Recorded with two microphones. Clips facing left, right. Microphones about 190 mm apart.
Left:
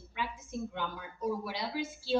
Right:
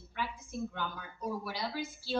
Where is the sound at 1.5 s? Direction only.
25° left (ahead or behind).